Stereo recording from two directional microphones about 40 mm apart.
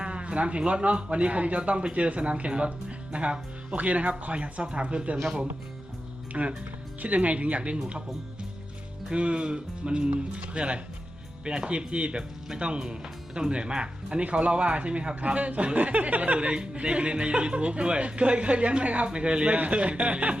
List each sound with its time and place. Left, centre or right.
0.0 s speech: right
5.1 s speech: centre
6.3 s speech: right
7.0 s speech: right
9.1 s speech: right
16.4 s speech: right